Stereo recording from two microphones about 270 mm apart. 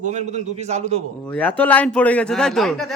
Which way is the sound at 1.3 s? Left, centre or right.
Centre.